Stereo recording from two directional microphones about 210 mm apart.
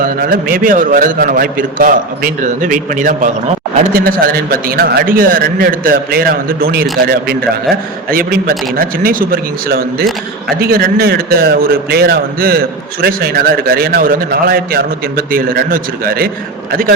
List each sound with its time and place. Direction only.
0.0 s a man's voice: 45° right (ahead or behind)